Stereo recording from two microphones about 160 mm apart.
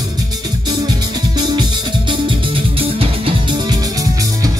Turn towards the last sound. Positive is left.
turn(degrees=-35)  # may be behind; listen again after turning